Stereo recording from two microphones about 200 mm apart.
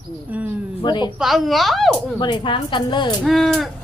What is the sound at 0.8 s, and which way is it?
Speech, 20° left (ahead or behind).